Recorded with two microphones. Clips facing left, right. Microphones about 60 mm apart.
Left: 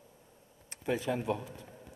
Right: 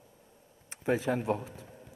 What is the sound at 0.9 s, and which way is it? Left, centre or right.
Speech, right.